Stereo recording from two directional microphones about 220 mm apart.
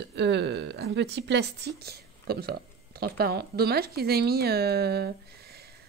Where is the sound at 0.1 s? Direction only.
50° right (ahead or behind).